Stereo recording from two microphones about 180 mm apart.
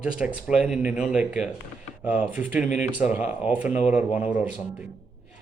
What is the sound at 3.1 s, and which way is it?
A man's voice, 10° right (ahead or behind).